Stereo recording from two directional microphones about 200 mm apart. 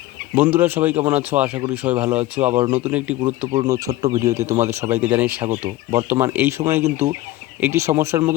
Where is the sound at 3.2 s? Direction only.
30° right (ahead or behind).